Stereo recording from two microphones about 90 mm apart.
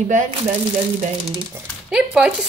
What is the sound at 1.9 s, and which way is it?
Speech, 10° right (ahead or behind).